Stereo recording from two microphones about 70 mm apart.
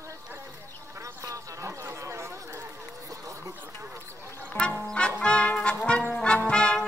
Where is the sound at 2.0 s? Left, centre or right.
Right.